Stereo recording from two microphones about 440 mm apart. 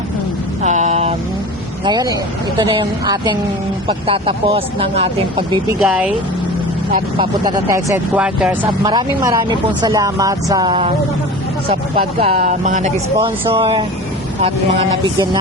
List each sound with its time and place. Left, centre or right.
0.6 s vehicle: centre
1.8 s speech: centre